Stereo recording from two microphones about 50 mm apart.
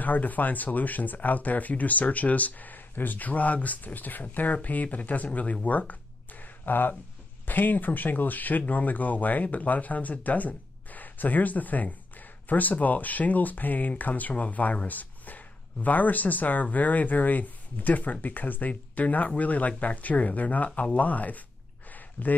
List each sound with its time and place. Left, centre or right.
0.0 s speech: left